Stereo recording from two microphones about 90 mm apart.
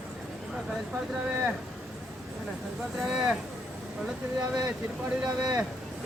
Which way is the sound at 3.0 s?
5° right (ahead or behind).